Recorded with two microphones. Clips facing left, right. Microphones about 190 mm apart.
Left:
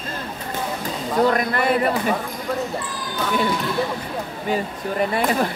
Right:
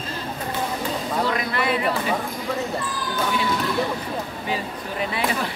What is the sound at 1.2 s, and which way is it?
Speech, 50° left (ahead or behind).